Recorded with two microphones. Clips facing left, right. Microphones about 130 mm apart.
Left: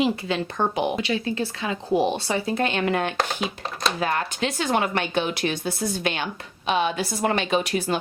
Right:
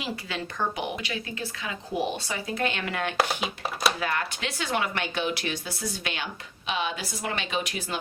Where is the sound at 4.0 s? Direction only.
35° left (ahead or behind).